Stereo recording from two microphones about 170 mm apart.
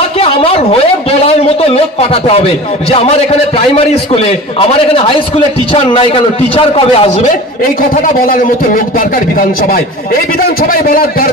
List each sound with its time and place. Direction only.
0.2 s a sound: 35° left (ahead or behind)
1.2 s a man's voice: 35° left (ahead or behind)
7.9 s a man's voice: 55° left (ahead or behind)